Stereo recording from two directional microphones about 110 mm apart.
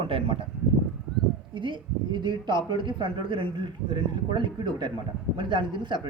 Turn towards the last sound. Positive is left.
turn(degrees=-45)  # may be behind; listen again after turning